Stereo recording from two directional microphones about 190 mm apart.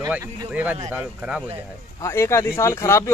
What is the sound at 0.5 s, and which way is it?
Speech, 10° right (ahead or behind).